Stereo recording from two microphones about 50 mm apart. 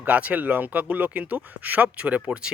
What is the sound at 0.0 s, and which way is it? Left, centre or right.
Speech, right.